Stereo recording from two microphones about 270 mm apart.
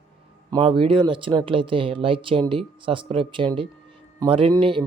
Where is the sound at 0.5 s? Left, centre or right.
Centre.